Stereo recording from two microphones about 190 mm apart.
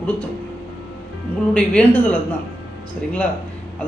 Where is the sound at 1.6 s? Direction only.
5° left (ahead or behind).